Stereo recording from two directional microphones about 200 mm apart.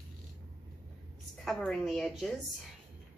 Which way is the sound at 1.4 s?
Centre (ahead or behind).